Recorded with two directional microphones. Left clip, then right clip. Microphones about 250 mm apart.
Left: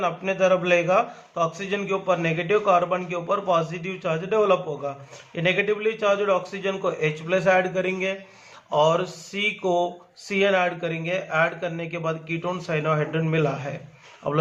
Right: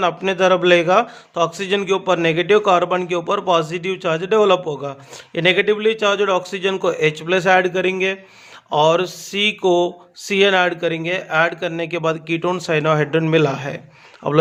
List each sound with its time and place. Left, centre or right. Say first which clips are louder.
0.0 s a man's voice: right 5 dB; right